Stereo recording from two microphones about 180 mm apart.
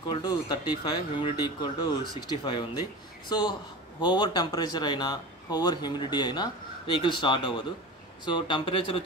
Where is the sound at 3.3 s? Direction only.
20° left (ahead or behind).